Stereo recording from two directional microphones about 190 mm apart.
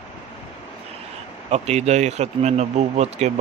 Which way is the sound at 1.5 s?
35° right (ahead or behind).